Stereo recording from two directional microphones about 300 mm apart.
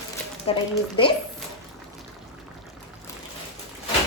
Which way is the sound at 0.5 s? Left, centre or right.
Centre.